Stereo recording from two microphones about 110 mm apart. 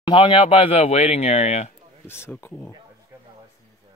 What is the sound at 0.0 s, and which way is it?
Speech, 45° left (ahead or behind).